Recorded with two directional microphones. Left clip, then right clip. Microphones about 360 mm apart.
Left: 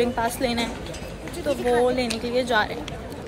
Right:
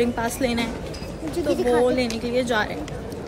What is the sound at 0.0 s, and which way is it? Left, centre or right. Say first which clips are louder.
A woman's voice: even; centre.